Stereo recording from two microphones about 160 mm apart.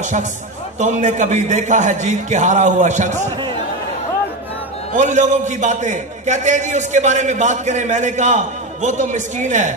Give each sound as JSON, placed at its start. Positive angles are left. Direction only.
{"t": 0.7, "sound": "a man's voice", "side_deg": -50}
{"t": 4.9, "sound": "a man's voice", "side_deg": -50}